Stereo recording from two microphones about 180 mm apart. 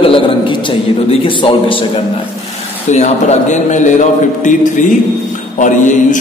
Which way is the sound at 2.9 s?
40° left (ahead or behind).